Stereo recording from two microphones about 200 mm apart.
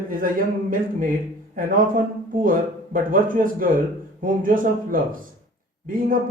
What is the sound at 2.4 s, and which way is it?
Speech, 45° right (ahead or behind).